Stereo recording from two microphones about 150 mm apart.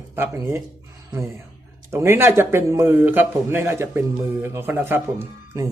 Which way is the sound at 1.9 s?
15° right (ahead or behind).